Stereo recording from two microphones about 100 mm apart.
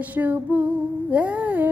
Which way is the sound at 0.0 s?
15° right (ahead or behind).